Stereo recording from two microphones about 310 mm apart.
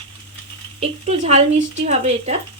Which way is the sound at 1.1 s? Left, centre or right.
Right.